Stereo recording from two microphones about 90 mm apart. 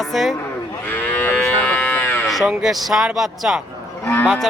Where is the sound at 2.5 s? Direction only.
5° right (ahead or behind).